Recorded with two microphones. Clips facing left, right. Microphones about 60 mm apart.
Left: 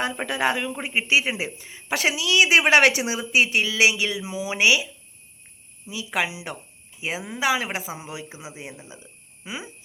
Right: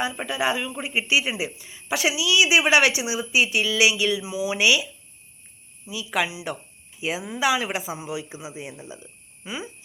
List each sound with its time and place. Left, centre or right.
0.0 s a woman's voice: left
5.9 s speech: left
8.9 s a sound: left